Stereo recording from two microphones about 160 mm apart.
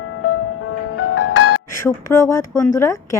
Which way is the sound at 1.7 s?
15° left (ahead or behind).